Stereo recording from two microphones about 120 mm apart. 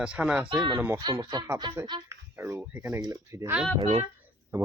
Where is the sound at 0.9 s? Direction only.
30° right (ahead or behind).